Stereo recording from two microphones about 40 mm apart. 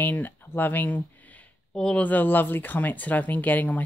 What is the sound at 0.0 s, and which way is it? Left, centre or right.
Speech, left.